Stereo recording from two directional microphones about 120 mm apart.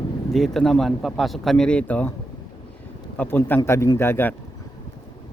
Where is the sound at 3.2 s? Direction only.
15° left (ahead or behind).